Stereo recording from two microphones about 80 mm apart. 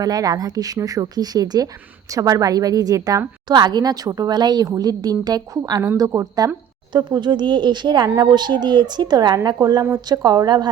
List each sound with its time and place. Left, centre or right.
0.0 s a woman's voice: right
3.5 s a woman's voice: right
7.1 s speech: right